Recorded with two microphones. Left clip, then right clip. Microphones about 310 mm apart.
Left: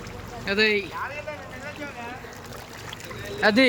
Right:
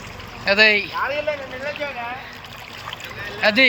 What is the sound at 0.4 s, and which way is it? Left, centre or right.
Speech, centre.